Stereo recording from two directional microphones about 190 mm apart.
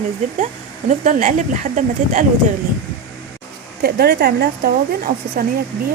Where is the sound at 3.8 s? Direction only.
55° right (ahead or behind).